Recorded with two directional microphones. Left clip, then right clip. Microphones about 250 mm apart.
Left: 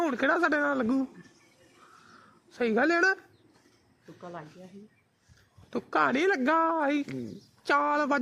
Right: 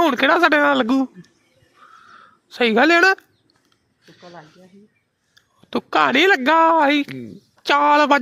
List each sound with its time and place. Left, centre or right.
0.0 s speech: centre
2.6 s speech: centre
4.2 s speech: centre
5.7 s a woman's voice: centre